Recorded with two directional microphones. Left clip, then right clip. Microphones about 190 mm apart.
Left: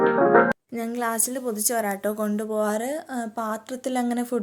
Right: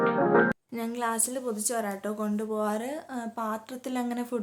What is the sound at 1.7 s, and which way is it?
A woman's voice, 30° left (ahead or behind).